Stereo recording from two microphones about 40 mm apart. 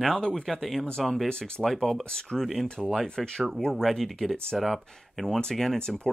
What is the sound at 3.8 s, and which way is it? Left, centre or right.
Speech, centre.